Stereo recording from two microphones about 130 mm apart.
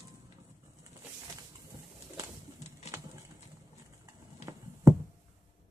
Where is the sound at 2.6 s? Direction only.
55° left (ahead or behind).